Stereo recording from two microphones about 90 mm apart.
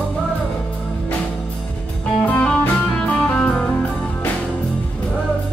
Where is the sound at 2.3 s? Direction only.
10° left (ahead or behind).